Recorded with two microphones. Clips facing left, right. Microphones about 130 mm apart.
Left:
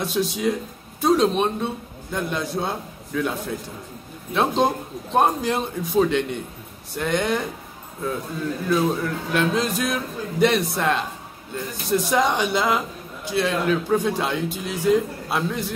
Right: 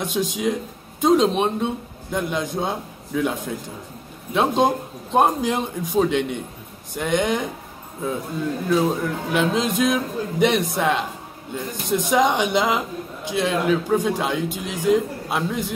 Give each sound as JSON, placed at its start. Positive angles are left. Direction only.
{"t": 0.0, "sound": "a man's voice", "side_deg": -15}
{"t": 8.6, "sound": "a man's voice", "side_deg": -10}